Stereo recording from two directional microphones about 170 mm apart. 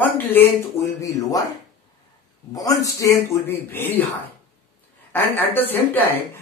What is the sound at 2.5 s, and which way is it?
Speech, 20° left (ahead or behind).